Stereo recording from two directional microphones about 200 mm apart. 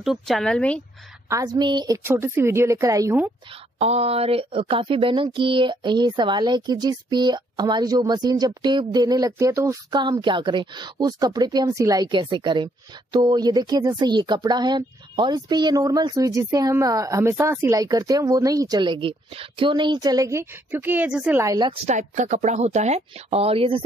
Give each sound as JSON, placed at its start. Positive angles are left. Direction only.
{"t": 0.0, "sound": "speech", "side_deg": 0}
{"t": 1.3, "sound": "a woman's voice", "side_deg": -20}
{"t": 3.8, "sound": "speech", "side_deg": -30}
{"t": 21.8, "sound": "speech", "side_deg": -35}